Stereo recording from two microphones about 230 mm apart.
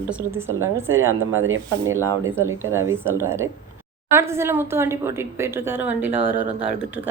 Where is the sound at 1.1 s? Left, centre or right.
Right.